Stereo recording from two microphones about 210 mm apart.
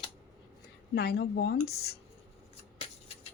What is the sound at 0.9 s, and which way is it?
Speech, 50° left (ahead or behind).